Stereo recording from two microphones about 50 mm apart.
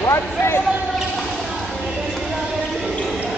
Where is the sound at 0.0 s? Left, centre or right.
Left.